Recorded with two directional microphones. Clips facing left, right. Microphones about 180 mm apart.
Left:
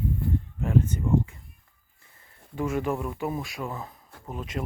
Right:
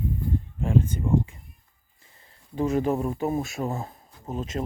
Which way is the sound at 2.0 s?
25° right (ahead or behind).